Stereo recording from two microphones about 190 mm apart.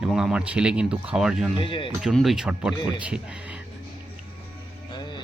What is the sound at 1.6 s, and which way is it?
Speech, 25° left (ahead or behind).